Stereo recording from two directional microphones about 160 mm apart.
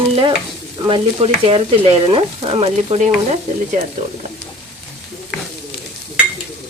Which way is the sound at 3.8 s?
50° right (ahead or behind).